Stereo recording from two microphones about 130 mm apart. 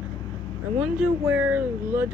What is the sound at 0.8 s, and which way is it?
Speech, 10° right (ahead or behind).